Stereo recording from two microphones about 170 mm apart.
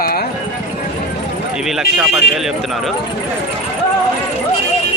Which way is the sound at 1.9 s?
Centre (ahead or behind).